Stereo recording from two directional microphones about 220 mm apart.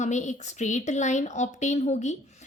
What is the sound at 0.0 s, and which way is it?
A woman's voice, 35° left (ahead or behind).